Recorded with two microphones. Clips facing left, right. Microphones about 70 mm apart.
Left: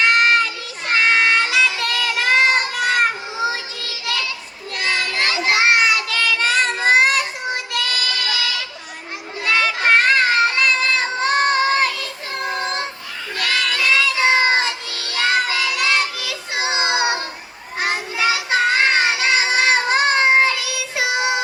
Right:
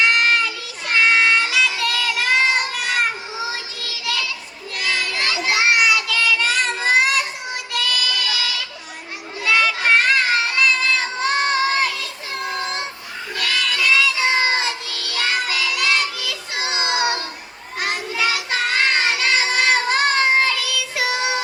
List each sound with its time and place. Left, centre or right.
0.0 s child singing: left
9.4 s a sound: left
12.5 s child singing: left